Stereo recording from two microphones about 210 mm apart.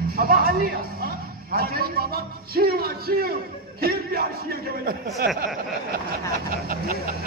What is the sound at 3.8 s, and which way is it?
Music, 45° right (ahead or behind).